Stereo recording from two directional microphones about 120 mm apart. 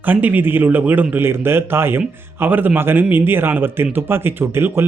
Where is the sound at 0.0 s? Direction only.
15° right (ahead or behind).